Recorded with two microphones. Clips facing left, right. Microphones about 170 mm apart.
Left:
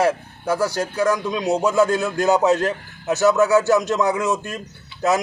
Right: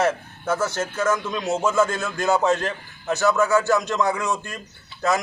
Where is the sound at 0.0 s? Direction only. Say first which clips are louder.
Left 3 dB; 10° left (ahead or behind).